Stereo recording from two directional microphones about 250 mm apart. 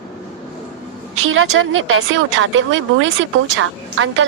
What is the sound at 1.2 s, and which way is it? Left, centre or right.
Speech, right.